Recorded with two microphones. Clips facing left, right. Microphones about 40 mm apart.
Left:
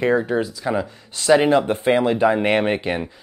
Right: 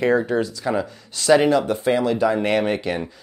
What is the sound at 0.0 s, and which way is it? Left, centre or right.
Speech, centre.